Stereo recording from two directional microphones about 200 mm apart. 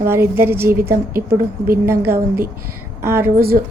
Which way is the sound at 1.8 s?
10° right (ahead or behind).